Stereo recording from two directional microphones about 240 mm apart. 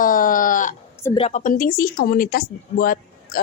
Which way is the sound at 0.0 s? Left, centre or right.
Left.